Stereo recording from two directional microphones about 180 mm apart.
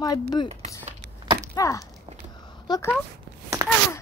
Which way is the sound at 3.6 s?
15° right (ahead or behind).